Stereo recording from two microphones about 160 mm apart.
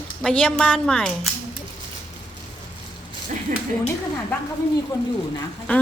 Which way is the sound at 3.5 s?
55° right (ahead or behind).